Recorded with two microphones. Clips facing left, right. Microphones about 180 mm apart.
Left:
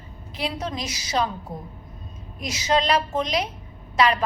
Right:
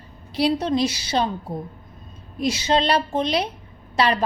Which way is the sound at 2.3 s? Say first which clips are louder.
Right 3 dB; 30° right (ahead or behind).